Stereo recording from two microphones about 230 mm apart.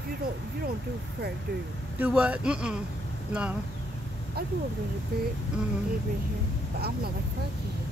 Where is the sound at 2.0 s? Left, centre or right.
Centre.